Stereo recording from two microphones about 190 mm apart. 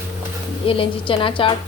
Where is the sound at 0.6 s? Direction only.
30° left (ahead or behind).